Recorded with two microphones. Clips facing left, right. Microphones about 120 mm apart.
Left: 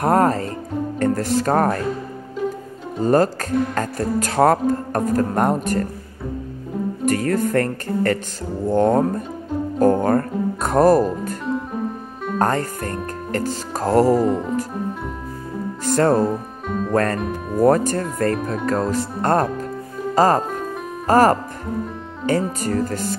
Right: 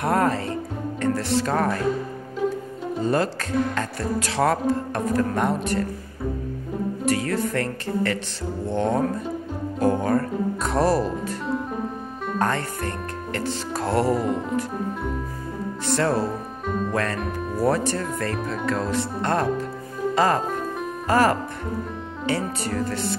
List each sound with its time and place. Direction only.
0.0 s speech: 40° left (ahead or behind)
3.0 s music: 45° left (ahead or behind)
7.1 s music: 45° left (ahead or behind)
9.8 s speech: 45° left (ahead or behind)
12.4 s speech: 40° left (ahead or behind)
14.2 s speech: centre (ahead or behind)
15.8 s music: 45° left (ahead or behind)
16.6 s music: centre (ahead or behind)
16.9 s music: 45° left (ahead or behind)
20.2 s speech: 40° left (ahead or behind)
22.2 s music: 45° left (ahead or behind)